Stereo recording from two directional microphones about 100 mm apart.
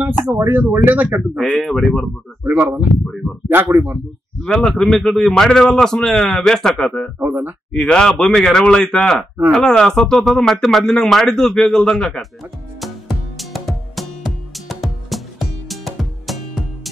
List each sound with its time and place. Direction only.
0.0 s speech: 20° right (ahead or behind)
1.6 s speech: 5° left (ahead or behind)
2.4 s speech: 20° right (ahead or behind)
4.4 s a man's voice: 5° left (ahead or behind)
7.2 s speech: 15° right (ahead or behind)
7.7 s speech: 5° left (ahead or behind)
13.4 s music: centre (ahead or behind)